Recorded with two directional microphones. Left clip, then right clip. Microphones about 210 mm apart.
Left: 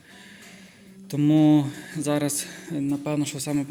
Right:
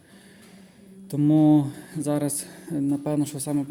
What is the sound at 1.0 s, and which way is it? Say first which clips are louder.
A man's voice: even; 20° right (ahead or behind).